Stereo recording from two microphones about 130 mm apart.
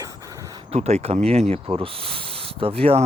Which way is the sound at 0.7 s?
55° right (ahead or behind).